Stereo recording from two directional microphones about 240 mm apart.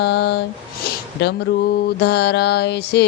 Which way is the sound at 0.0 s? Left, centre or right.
Left.